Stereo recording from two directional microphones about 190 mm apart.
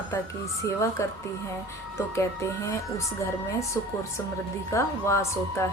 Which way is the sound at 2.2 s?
15° left (ahead or behind).